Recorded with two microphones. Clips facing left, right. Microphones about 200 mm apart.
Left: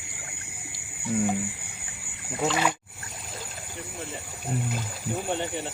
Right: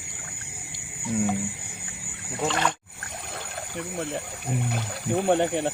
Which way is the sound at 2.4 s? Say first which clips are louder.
Left 1 dB; 5° left (ahead or behind).